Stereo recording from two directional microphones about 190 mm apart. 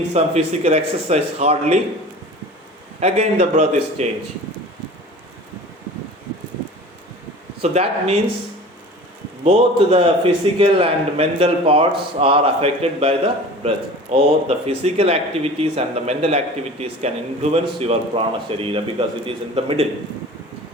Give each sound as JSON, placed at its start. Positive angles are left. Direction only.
{"t": 0.1, "sound": "a man's voice", "side_deg": -35}
{"t": 3.0, "sound": "a man's voice", "side_deg": -35}
{"t": 7.6, "sound": "a man's voice", "side_deg": -35}
{"t": 9.4, "sound": "a man's voice", "side_deg": -30}